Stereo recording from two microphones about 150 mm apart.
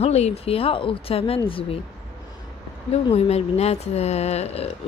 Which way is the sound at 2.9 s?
45° left (ahead or behind).